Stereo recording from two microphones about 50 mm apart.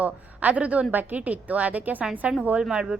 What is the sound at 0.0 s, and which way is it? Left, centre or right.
Speech, right.